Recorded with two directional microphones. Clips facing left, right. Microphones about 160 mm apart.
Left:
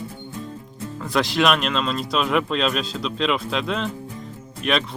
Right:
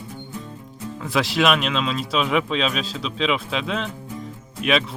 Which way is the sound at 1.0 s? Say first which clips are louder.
Even; 5° right (ahead or behind).